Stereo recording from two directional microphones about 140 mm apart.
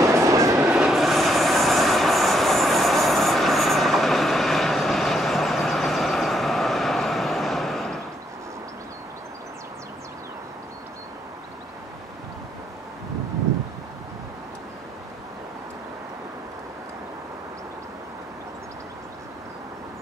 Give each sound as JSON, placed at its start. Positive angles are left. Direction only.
{"t": 0.0, "sound": "train", "side_deg": -20}
{"t": 0.7, "sound": "train", "side_deg": -5}